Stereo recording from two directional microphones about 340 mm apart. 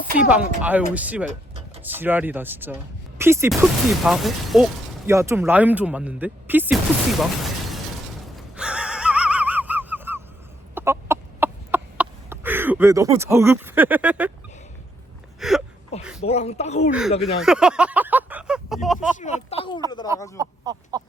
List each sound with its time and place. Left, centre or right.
0.2 s speech: centre
8.4 s laughter: centre
10.8 s chicken: centre
15.4 s a sound: centre
16.2 s speech: centre
17.4 s speech: centre
19.1 s speech: centre
20.3 s speech: centre